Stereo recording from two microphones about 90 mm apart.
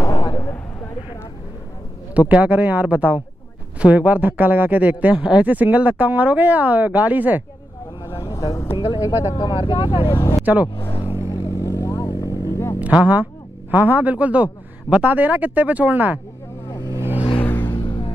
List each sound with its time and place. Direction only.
0.0 s a sound: 40° left (ahead or behind)
2.1 s speech: 15° right (ahead or behind)
8.0 s vehicle: 35° left (ahead or behind)
8.7 s speech: 50° left (ahead or behind)
9.5 s speech: 80° left
10.1 s speech: 35° left (ahead or behind)
10.4 s speech: 20° right (ahead or behind)
11.3 s vehicle: 35° left (ahead or behind)
12.8 s a man's voice: 15° right (ahead or behind)
17.4 s vehicle: 20° left (ahead or behind)
17.7 s music: 55° left (ahead or behind)